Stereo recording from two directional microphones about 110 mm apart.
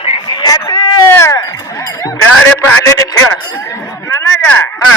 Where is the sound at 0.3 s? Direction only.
40° left (ahead or behind).